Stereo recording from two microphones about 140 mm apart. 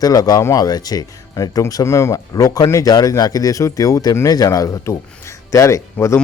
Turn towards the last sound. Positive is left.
turn(degrees=20)  # may be behind; listen again after turning